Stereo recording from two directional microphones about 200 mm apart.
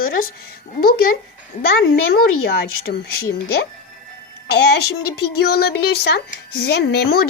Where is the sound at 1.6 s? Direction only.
50° left (ahead or behind).